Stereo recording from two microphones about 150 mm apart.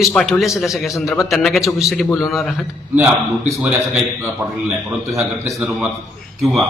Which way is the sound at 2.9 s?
15° right (ahead or behind).